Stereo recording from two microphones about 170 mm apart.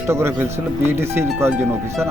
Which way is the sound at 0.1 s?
15° right (ahead or behind).